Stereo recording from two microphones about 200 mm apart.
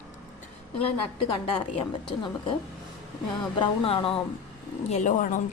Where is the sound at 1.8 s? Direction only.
25° left (ahead or behind).